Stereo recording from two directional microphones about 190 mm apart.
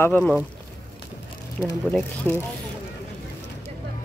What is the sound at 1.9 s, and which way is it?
Speech, 10° left (ahead or behind).